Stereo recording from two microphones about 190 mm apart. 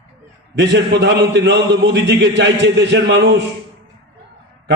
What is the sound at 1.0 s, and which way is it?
A man's voice, 65° right (ahead or behind).